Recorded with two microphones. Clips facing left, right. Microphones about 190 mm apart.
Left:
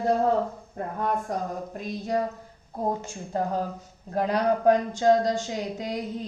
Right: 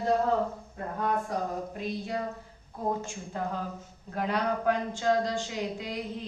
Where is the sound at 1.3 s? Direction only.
45° left (ahead or behind).